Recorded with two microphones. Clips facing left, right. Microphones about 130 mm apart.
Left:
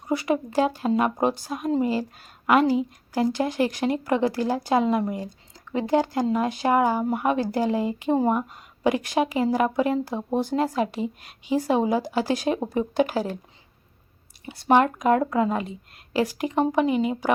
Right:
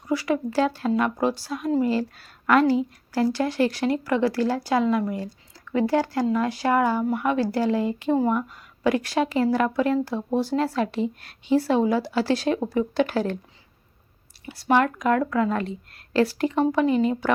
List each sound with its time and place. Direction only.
0.1 s a woman's voice: 20° left (ahead or behind)
14.6 s speech: 20° left (ahead or behind)
15.4 s a woman's voice: 15° left (ahead or behind)